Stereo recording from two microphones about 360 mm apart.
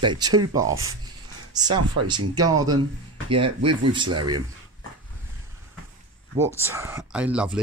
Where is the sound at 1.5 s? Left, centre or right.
Centre.